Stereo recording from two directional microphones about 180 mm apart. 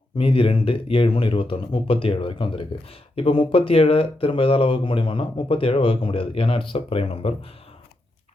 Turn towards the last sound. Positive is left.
turn(degrees=30)  # may be behind; listen again after turning